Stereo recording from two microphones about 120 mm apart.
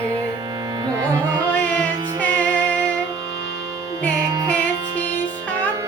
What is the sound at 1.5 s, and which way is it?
Music, 10° left (ahead or behind).